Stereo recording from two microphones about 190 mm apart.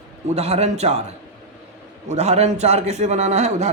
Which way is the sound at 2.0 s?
35° right (ahead or behind).